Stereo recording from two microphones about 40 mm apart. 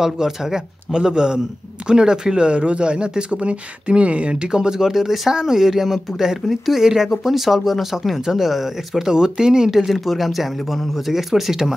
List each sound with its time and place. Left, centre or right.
0.0 s speech: centre
9.8 s speech: centre